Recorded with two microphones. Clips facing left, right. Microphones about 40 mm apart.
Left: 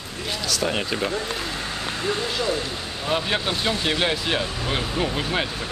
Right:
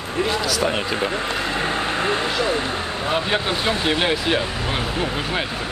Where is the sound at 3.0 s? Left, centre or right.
Centre.